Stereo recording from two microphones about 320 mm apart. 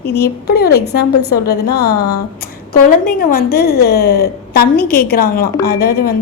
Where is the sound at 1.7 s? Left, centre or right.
Left.